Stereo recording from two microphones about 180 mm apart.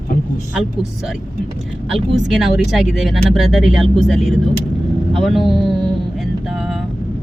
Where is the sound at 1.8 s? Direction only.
Centre (ahead or behind).